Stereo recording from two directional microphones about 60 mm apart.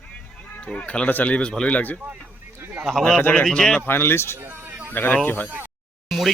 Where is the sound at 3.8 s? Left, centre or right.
Left.